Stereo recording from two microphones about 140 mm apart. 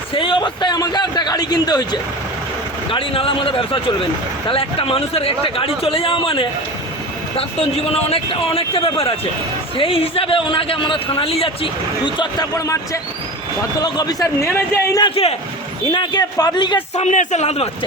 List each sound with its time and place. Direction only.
0.1 s a man's voice: 35° left (ahead or behind)
2.9 s a man's voice: 40° left (ahead or behind); by 15.0 s 20° left (ahead or behind)
15.0 s speech: 45° left (ahead or behind)
15.9 s a man's voice: 35° left (ahead or behind)
16.9 s speech: 55° left (ahead or behind)